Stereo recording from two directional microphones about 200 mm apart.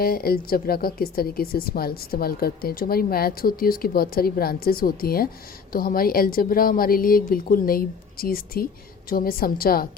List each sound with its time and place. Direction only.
0.0 s speech: 50° left (ahead or behind)